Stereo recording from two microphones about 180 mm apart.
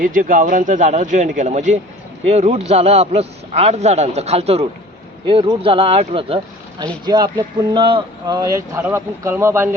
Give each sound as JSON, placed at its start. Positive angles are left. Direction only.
{"t": 0.0, "sound": "a man's voice", "side_deg": -50}